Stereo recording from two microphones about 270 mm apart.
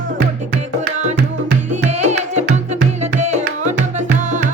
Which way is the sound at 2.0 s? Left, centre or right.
Right.